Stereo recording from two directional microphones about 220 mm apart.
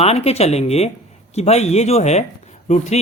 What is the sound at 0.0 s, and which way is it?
Speech, 30° left (ahead or behind).